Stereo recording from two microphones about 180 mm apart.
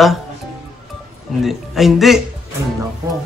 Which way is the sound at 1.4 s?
Centre (ahead or behind).